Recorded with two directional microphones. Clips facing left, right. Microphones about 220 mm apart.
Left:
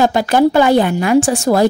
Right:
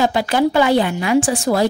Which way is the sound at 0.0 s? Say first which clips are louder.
Left 4 dB; 45° left (ahead or behind).